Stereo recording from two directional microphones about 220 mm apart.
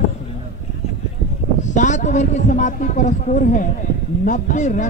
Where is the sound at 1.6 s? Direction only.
35° left (ahead or behind).